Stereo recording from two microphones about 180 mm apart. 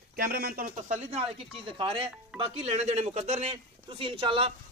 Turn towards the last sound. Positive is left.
turn(degrees=-30)  # may be behind; listen again after turning